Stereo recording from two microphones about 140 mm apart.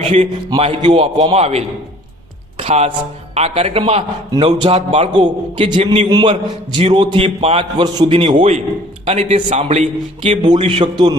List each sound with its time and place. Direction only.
0.0 s a man's voice: 45° right (ahead or behind)
6.1 s a man's voice: 30° right (ahead or behind); by 9.9 s 55° right (ahead or behind)
10.2 s a man's voice: 35° right (ahead or behind)